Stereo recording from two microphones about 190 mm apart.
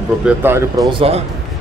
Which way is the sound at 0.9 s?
30° right (ahead or behind).